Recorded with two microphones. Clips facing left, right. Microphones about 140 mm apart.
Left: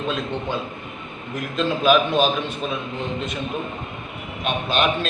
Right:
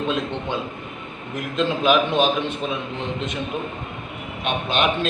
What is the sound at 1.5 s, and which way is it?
Speech, 20° right (ahead or behind).